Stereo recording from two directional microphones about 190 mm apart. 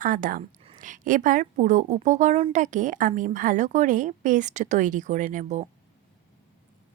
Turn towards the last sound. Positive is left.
turn(degrees=-40)  # may be behind; listen again after turning